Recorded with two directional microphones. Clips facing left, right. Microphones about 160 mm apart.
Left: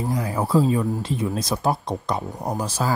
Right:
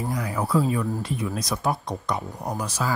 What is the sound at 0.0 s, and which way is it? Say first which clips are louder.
Speech: left 3 dB; 25° left (ahead or behind).